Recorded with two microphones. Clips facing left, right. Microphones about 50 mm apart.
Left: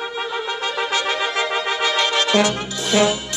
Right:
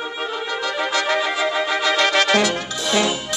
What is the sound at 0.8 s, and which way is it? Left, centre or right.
Brass instrument, right.